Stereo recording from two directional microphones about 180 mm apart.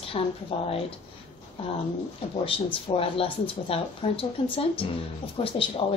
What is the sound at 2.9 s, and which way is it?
Speech, 30° left (ahead or behind).